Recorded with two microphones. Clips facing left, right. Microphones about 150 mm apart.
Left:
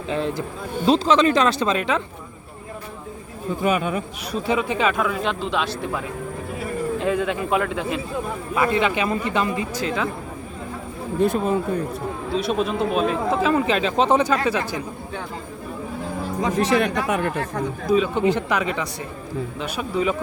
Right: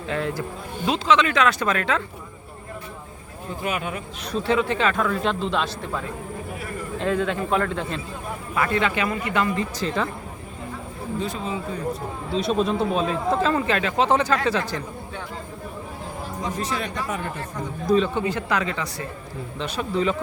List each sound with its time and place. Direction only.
0.1 s a man's voice: 20° left (ahead or behind)
0.9 s speech: 35° left (ahead or behind); by 2.0 s 20° left (ahead or behind)
4.3 s speech: 15° left (ahead or behind)
7.0 s a man's voice: 10° left (ahead or behind)
9.7 s speech: 5° left (ahead or behind)
11.2 s speech: 55° left (ahead or behind)
12.4 s speech: 5° left (ahead or behind)
13.6 s speech: 20° left (ahead or behind)
16.4 s speech: 80° left
17.8 s speech: 5° left (ahead or behind)
18.1 s speech: 15° left (ahead or behind)